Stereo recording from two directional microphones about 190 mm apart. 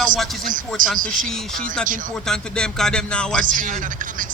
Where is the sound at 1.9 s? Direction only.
45° right (ahead or behind).